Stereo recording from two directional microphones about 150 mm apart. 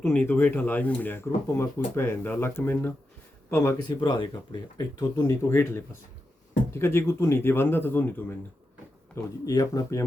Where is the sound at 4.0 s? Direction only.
30° left (ahead or behind); by 8.4 s 15° left (ahead or behind).